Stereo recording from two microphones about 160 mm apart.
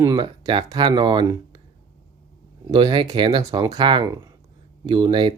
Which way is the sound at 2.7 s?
30° right (ahead or behind).